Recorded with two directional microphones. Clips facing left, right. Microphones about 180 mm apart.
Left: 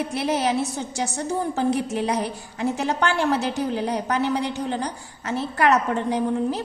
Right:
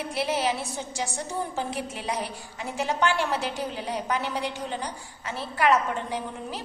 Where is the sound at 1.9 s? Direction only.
45° left (ahead or behind).